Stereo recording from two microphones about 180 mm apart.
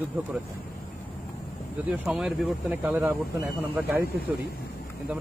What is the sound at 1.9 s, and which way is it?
Speech, 5° right (ahead or behind).